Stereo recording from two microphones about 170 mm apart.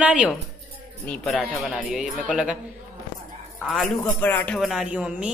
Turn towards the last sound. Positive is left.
turn(degrees=-5)  # may be behind; listen again after turning